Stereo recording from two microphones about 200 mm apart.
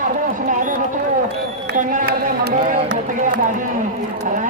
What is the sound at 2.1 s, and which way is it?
Speech, 55° right (ahead or behind).